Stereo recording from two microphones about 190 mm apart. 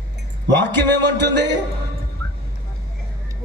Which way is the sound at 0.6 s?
65° right (ahead or behind).